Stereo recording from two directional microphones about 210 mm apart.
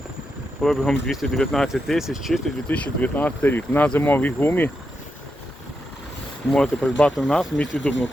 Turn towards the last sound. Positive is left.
turn(degrees=5)  # may be behind; listen again after turning